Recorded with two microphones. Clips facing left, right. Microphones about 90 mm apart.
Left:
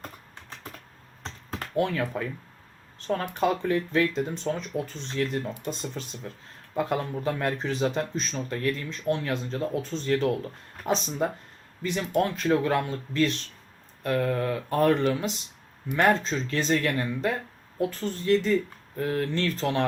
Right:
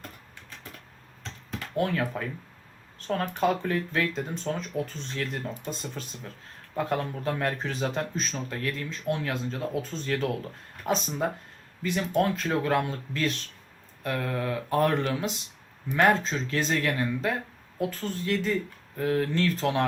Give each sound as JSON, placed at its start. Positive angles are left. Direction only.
{"t": 1.2, "sound": "computer keyboard", "side_deg": 45}
{"t": 1.7, "sound": "speech", "side_deg": -5}